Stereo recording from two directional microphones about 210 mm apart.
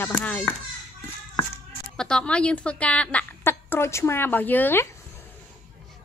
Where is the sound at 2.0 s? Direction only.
5° left (ahead or behind).